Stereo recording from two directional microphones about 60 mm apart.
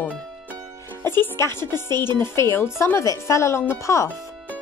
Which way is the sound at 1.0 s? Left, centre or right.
Left.